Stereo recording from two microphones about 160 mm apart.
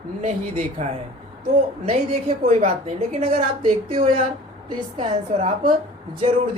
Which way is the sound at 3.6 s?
35° right (ahead or behind).